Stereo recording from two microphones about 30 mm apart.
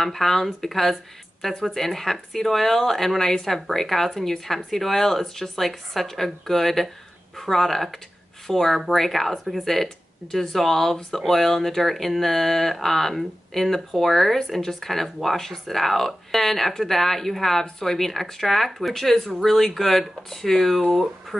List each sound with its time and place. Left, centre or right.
0.0 s speech: centre
3.4 s speech: centre
20.8 s speech: centre